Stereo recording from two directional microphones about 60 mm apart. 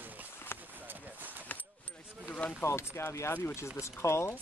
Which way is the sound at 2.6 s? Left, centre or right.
Left.